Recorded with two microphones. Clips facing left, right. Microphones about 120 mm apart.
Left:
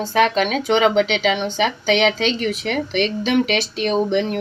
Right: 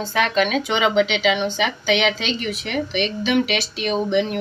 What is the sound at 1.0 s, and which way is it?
Speech, 10° right (ahead or behind).